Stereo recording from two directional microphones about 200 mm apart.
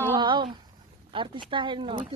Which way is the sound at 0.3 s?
25° right (ahead or behind).